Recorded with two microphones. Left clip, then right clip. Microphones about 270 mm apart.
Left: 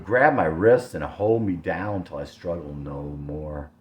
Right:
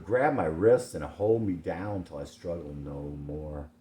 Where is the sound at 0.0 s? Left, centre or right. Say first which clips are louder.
Left 7 dB; left.